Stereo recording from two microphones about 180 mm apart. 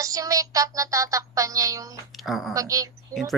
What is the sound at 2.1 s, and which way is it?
Speech, centre (ahead or behind).